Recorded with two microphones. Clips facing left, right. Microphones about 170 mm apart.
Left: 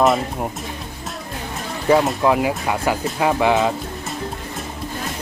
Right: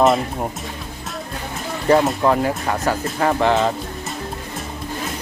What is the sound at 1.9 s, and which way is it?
Speech, centre (ahead or behind).